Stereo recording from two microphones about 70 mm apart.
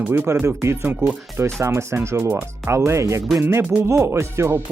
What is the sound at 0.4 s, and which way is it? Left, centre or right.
Speech, right.